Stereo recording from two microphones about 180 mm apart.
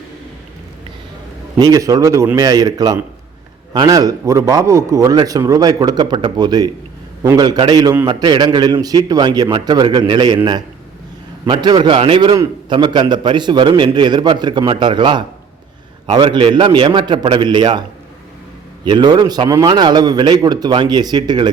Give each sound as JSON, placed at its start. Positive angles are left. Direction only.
{"t": 1.5, "sound": "a man's voice", "side_deg": -20}
{"t": 18.9, "sound": "a man's voice", "side_deg": -25}